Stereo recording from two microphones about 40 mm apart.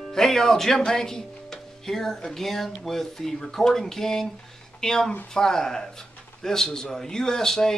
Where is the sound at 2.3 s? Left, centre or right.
Centre.